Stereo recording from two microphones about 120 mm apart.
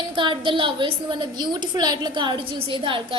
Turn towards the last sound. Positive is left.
turn(degrees=-45)  # may be behind; listen again after turning